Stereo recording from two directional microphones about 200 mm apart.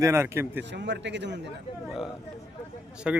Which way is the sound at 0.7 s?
60° right (ahead or behind).